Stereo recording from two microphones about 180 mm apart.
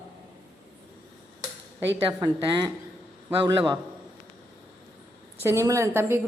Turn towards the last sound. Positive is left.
turn(degrees=-15)  # may be behind; listen again after turning